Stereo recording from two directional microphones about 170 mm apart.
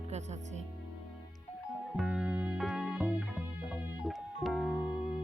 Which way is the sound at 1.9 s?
5° right (ahead or behind).